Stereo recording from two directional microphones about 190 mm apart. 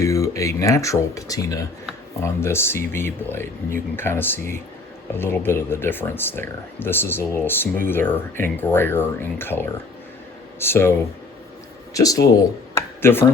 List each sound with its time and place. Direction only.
0.0 s speech: 15° left (ahead or behind)
11.9 s speech: 20° left (ahead or behind)